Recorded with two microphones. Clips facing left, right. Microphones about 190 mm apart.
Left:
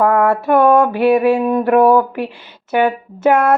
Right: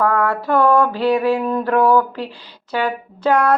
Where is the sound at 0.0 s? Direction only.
25° left (ahead or behind).